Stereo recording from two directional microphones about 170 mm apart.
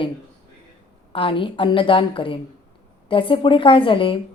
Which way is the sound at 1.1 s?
30° left (ahead or behind).